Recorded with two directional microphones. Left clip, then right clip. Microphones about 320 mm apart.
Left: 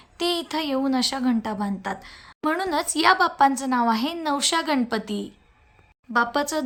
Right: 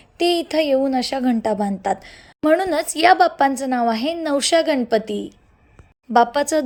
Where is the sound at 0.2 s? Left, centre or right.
Centre.